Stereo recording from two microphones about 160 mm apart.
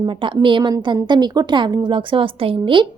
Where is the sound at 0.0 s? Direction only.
30° right (ahead or behind).